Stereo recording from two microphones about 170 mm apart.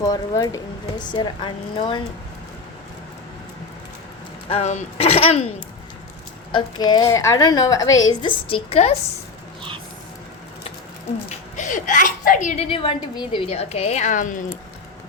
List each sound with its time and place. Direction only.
0.0 s speech: 20° left (ahead or behind)
4.4 s speech: 40° left (ahead or behind)
6.5 s speech: 25° left (ahead or behind)
11.3 s a child's voice: 45° left (ahead or behind)